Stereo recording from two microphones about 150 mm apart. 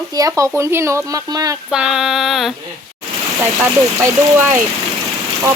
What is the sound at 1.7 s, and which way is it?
Female singing, 5° right (ahead or behind).